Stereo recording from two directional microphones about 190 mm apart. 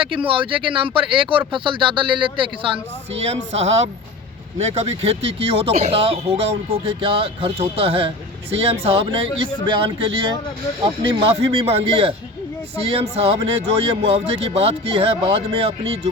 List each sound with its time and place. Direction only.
0.0 s speech: 25° right (ahead or behind)